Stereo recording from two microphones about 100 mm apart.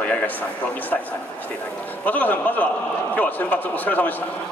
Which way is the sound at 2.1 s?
15° left (ahead or behind).